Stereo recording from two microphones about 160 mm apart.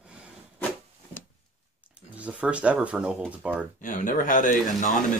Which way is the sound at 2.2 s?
10° right (ahead or behind).